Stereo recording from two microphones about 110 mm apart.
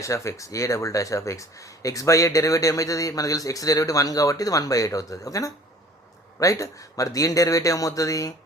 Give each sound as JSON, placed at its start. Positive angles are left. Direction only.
{"t": 0.0, "sound": "speech", "side_deg": 25}